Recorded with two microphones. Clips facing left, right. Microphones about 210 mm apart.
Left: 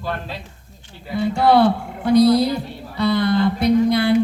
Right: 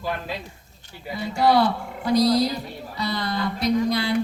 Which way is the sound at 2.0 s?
55° left (ahead or behind).